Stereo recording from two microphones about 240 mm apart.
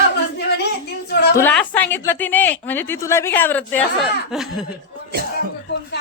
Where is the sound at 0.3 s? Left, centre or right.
Left.